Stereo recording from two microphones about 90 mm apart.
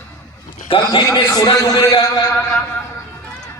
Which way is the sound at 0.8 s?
45° left (ahead or behind).